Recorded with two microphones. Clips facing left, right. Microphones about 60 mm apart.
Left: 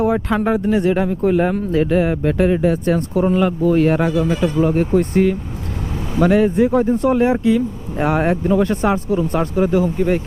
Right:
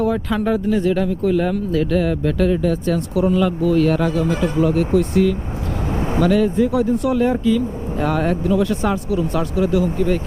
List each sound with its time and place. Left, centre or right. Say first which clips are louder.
0.0 s speech: left 2 dB; left